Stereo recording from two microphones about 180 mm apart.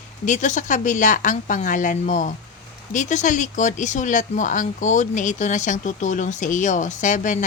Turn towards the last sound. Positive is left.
turn(degrees=45)  # may be behind; listen again after turning